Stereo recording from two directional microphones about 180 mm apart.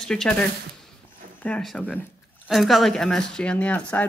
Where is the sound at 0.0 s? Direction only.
5° left (ahead or behind).